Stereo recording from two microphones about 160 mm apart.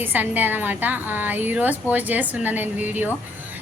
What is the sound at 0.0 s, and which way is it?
A woman's voice, 10° right (ahead or behind).